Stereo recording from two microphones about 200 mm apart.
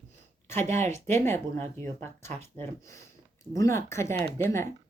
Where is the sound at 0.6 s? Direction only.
35° right (ahead or behind).